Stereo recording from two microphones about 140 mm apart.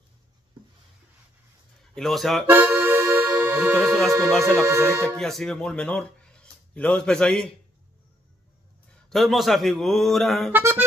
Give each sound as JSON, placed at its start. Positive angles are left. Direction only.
{"t": 2.0, "sound": "a man's voice", "side_deg": 0}
{"t": 2.4, "sound": "accordion", "side_deg": -15}
{"t": 3.8, "sound": "a man's voice", "side_deg": 0}
{"t": 4.5, "sound": "speech", "side_deg": -20}
{"t": 5.1, "sound": "speech", "side_deg": 5}
{"t": 9.1, "sound": "a man's voice", "side_deg": 0}
{"t": 10.5, "sound": "music", "side_deg": -15}